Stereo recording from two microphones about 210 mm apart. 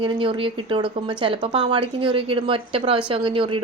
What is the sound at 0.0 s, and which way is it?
A woman's voice, 25° right (ahead or behind).